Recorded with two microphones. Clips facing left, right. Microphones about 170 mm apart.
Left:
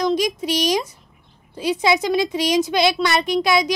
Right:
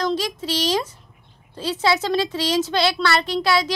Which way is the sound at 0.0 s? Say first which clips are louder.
Left 4 dB; 15° left (ahead or behind).